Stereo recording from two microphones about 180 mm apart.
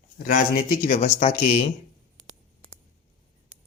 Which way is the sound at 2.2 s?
Centre (ahead or behind).